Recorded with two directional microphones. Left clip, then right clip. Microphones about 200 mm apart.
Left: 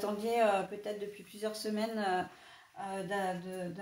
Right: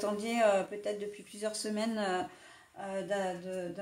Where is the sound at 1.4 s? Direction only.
50° right (ahead or behind).